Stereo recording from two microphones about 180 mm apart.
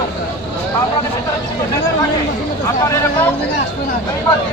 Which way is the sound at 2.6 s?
15° left (ahead or behind).